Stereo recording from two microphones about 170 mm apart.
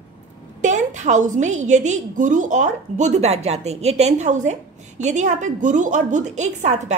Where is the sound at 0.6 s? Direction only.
45° right (ahead or behind).